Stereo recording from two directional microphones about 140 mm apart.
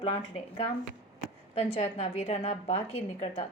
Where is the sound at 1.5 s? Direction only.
50° left (ahead or behind).